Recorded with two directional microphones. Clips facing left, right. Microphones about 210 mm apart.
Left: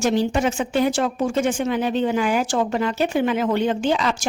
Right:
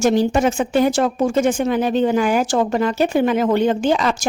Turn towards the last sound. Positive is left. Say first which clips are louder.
# right 3 dB
turn(degrees=-45)  # may be behind; listen again after turning